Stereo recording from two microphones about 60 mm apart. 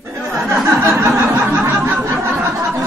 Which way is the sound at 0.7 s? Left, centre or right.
Right.